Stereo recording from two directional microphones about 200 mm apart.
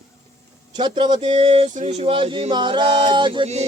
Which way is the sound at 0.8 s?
20° right (ahead or behind).